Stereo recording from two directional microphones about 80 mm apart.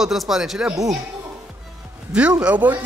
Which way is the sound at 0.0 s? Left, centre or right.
Centre.